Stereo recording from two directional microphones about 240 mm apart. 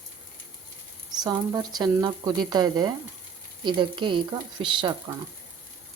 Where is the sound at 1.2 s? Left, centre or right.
Centre.